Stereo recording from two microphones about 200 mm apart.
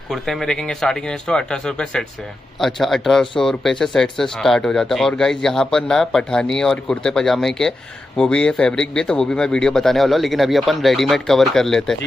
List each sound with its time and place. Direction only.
0.1 s speech: centre (ahead or behind)